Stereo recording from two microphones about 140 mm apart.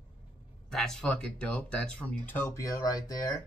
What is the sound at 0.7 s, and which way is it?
Speech, 5° left (ahead or behind).